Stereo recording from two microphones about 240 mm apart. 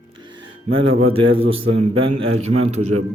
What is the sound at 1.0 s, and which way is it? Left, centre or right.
Speech, right.